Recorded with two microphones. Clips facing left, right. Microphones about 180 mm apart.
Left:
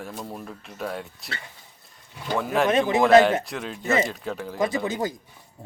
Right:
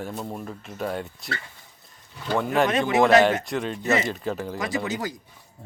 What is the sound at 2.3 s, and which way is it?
Speech, centre (ahead or behind).